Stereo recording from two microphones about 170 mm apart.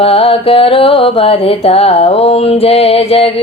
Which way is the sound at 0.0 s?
35° left (ahead or behind).